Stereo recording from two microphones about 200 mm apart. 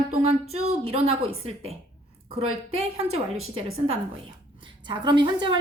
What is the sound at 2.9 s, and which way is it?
Speech, 30° right (ahead or behind).